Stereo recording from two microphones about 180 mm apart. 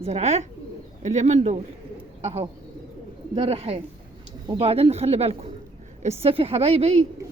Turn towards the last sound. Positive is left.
turn(degrees=-35)  # may be behind; listen again after turning